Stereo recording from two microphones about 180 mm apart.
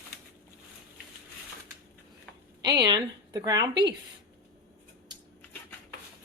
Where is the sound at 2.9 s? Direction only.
20° right (ahead or behind).